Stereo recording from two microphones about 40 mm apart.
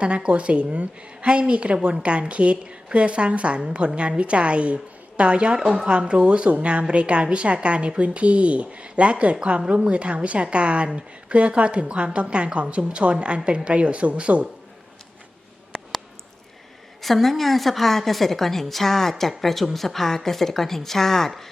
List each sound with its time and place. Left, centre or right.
0.0 s a woman's voice: right
5.5 s a woman's voice: centre
17.0 s a woman's voice: centre